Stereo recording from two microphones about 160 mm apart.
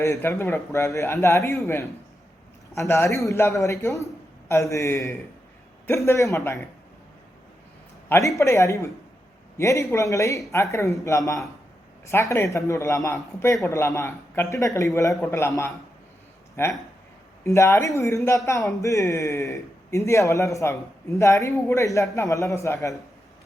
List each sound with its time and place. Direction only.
0.0 s a man's voice: 15° left (ahead or behind)
8.4 s a man's voice: 15° left (ahead or behind)